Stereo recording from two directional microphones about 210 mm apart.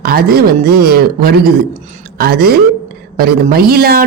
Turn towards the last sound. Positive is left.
turn(degrees=-45)  # may be behind; listen again after turning